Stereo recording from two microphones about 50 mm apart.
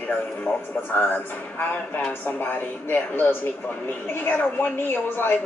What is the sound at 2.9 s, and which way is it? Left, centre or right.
A woman's voice, left.